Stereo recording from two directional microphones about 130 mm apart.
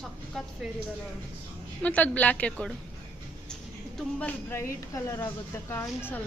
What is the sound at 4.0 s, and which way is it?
A woman's voice, 10° left (ahead or behind).